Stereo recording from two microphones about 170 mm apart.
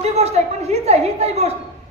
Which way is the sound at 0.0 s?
40° right (ahead or behind).